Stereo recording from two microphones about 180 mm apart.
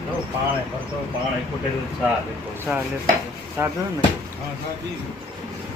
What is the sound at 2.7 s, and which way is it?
A man's voice, 10° right (ahead or behind).